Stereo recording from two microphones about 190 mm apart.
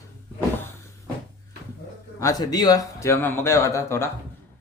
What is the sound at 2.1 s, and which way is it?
Speech, 20° left (ahead or behind).